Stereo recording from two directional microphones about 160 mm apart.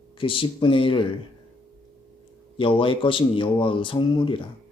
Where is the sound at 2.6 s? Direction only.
35° left (ahead or behind).